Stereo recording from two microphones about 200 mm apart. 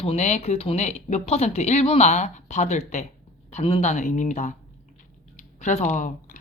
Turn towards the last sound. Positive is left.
turn(degrees=40)  # may be behind; listen again after turning